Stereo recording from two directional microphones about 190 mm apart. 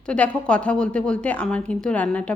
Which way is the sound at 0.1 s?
5° left (ahead or behind).